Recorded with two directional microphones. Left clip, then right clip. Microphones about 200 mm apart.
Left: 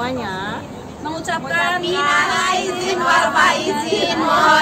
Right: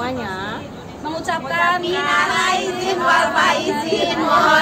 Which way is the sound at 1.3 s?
Centre (ahead or behind).